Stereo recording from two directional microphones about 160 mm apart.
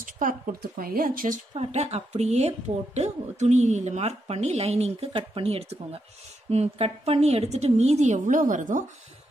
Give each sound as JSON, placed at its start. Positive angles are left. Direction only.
{"t": 0.0, "sound": "speech", "side_deg": -60}
{"t": 1.5, "sound": "speech", "side_deg": -40}